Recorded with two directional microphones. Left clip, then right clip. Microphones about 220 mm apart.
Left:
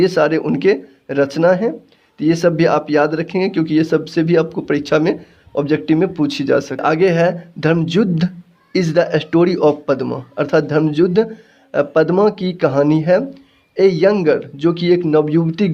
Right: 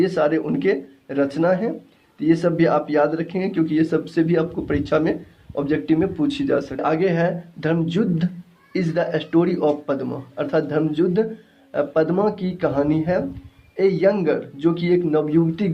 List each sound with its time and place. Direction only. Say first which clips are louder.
0.0 s speech: left 5 dB; 45° left (ahead or behind)